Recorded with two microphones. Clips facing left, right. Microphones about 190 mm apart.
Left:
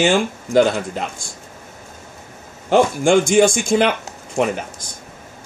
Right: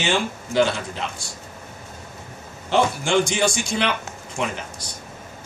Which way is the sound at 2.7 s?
50° left (ahead or behind).